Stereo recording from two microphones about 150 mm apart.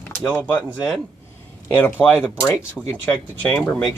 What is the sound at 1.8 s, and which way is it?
Speech, 15° left (ahead or behind).